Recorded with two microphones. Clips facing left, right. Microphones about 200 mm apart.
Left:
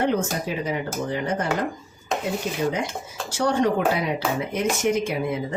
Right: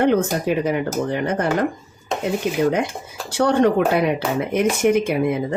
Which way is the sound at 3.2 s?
60° right (ahead or behind).